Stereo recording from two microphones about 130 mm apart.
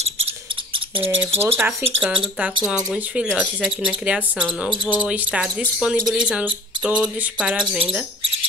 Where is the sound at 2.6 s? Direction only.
5° right (ahead or behind).